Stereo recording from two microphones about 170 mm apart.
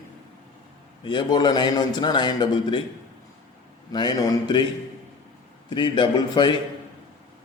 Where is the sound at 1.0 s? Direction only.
25° left (ahead or behind).